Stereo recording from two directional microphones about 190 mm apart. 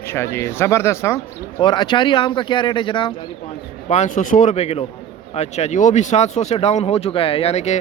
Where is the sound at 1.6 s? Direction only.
25° left (ahead or behind).